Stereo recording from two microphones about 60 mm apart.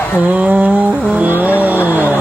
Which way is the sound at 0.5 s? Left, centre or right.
Centre.